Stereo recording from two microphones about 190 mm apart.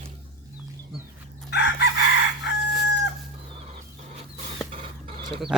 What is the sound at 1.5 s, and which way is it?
Chicken, 60° left (ahead or behind).